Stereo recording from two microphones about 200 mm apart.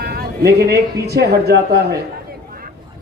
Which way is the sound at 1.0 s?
55° right (ahead or behind).